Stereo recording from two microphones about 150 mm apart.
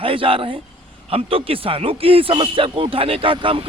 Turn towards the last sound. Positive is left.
turn(degrees=-35)  # may be behind; listen again after turning